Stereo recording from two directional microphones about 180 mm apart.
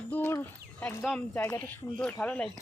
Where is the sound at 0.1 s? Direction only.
10° left (ahead or behind).